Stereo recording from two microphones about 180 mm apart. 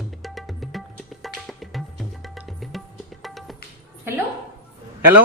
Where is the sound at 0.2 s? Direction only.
Centre (ahead or behind).